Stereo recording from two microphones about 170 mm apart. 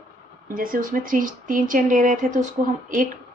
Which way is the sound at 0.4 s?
55° right (ahead or behind).